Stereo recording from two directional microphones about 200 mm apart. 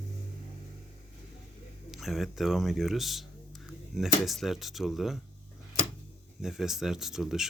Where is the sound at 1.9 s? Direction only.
Centre (ahead or behind).